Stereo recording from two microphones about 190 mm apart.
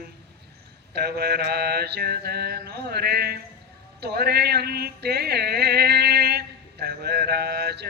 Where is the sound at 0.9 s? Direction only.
60° right (ahead or behind).